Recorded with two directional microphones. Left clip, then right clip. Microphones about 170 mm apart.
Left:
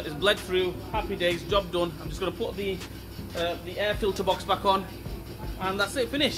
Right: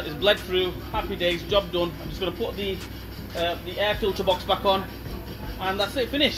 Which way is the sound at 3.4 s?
Centre (ahead or behind).